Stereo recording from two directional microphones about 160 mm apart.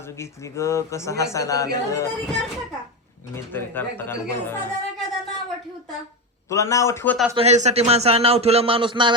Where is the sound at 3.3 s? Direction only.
15° left (ahead or behind).